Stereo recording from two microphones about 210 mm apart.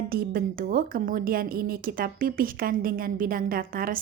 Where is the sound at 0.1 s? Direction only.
45° right (ahead or behind).